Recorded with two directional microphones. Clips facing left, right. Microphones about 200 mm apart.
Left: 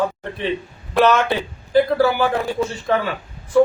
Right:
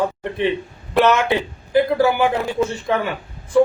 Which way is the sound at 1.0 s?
20° right (ahead or behind).